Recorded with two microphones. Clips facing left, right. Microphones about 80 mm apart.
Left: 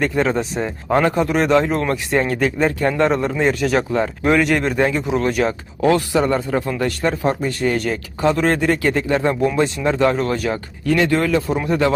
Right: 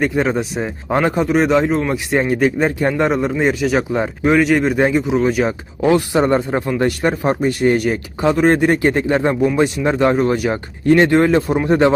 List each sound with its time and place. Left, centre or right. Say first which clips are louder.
0.0 s speech: right 1 dB; centre
1.2 s speech: right 2 dB; centre
2.1 s speech: right 3 dB; centre
5.0 s speech: right 2 dB; centre
5.5 s speech: right 1 dB; centre
10.5 s speech: right 5 dB; right